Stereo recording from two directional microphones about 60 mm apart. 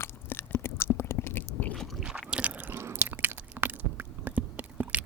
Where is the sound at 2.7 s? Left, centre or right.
Right.